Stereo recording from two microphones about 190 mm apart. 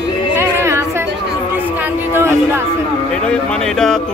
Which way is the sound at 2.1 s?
15° right (ahead or behind).